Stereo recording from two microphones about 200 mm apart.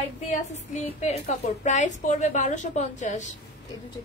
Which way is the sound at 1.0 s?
30° left (ahead or behind).